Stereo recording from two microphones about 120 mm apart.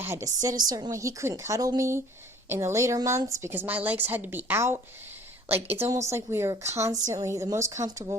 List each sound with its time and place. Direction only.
0.0 s a woman's voice: 20° right (ahead or behind)
0.4 s a woman's voice: 35° right (ahead or behind)